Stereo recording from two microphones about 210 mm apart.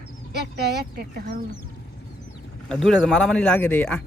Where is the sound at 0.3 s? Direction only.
50° right (ahead or behind).